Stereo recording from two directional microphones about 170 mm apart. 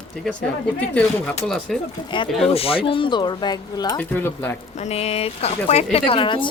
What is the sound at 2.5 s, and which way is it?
Speech, 35° left (ahead or behind).